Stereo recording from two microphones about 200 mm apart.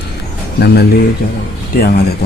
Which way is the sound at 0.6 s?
55° left (ahead or behind).